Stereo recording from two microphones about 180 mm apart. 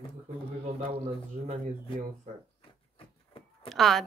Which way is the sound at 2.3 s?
40° right (ahead or behind).